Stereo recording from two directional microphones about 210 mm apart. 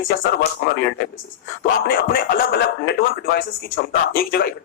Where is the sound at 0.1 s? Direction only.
55° left (ahead or behind).